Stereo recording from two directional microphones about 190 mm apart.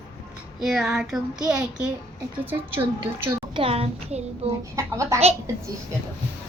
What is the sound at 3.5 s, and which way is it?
A child's voice, 30° right (ahead or behind).